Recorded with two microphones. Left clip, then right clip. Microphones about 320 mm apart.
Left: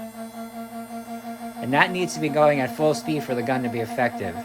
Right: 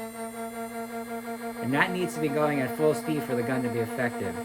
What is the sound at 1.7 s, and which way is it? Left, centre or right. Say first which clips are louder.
Speech: left 6 dB; centre.